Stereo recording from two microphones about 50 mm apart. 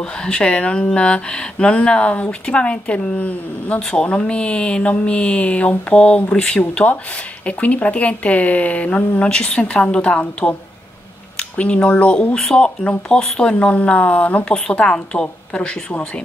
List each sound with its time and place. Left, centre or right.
0.0 s speech: centre
3.8 s speech: left
7.4 s speech: left